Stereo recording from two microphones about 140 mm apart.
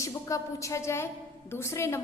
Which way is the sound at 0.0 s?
20° left (ahead or behind).